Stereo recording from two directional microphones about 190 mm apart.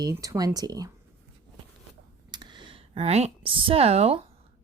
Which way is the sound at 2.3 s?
25° right (ahead or behind).